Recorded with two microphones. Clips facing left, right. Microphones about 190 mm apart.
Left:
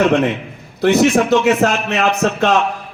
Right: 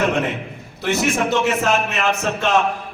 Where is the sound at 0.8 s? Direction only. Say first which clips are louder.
Left 8 dB; 60° left (ahead or behind).